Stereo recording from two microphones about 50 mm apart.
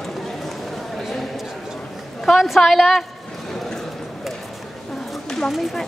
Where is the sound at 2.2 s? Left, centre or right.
Centre.